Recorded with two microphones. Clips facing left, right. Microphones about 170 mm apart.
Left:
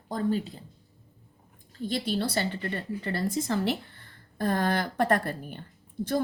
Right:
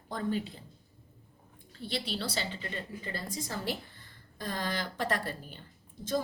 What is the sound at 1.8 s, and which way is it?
A woman's voice, 45° left (ahead or behind).